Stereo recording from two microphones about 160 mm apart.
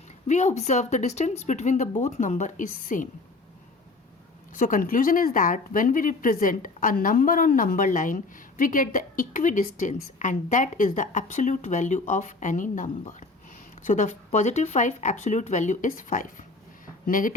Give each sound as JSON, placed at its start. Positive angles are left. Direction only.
{"t": 0.3, "sound": "a woman's voice", "side_deg": 45}
{"t": 4.5, "sound": "a woman's voice", "side_deg": 55}
{"t": 16.8, "sound": "a sound", "side_deg": 60}